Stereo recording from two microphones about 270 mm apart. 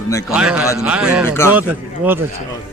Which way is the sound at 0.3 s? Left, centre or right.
Centre.